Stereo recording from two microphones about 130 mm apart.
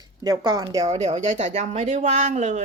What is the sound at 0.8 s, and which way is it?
Speech, 60° right (ahead or behind).